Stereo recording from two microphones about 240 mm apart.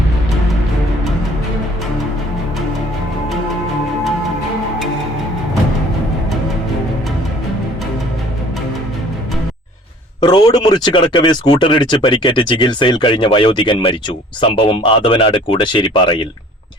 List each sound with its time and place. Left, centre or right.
10.2 s speech: left